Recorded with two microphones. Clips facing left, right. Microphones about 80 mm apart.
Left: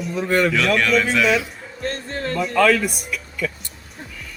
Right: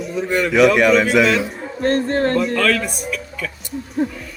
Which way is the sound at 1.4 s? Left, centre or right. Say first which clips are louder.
Right 8 dB; right.